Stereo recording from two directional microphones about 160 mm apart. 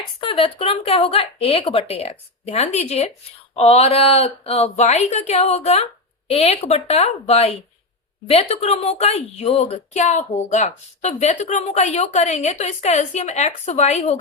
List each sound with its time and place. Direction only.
0.2 s speech: 35° left (ahead or behind)